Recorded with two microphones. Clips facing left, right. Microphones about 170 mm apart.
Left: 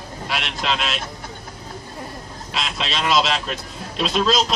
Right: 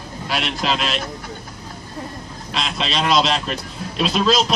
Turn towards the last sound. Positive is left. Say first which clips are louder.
# right 2 dB
turn(degrees=0)  # may be behind; listen again after turning